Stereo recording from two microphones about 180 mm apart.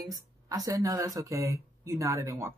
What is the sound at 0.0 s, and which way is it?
Speech, 20° right (ahead or behind).